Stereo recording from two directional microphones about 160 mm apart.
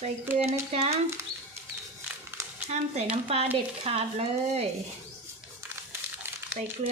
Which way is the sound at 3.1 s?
40° right (ahead or behind).